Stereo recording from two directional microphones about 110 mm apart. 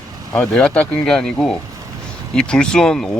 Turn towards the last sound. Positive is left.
turn(degrees=5)  # may be behind; listen again after turning